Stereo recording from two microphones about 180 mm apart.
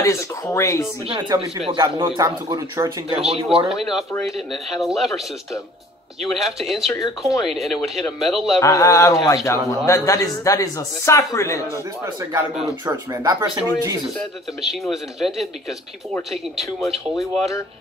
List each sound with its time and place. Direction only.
0.0 s a man's voice: 15° left (ahead or behind)
1.3 s speech: 20° right (ahead or behind)
3.6 s speech: centre (ahead or behind)
6.2 s speech: centre (ahead or behind)
8.5 s a man's voice: 15° left (ahead or behind)
12.2 s speech: 15° right (ahead or behind)
14.6 s speech: centre (ahead or behind)